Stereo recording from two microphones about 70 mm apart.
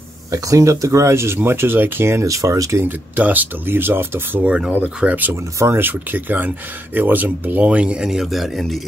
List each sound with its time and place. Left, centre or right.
0.3 s speech: right
2.8 s speech: right
4.5 s speech: centre
5.3 s speech: right; by 8.8 s centre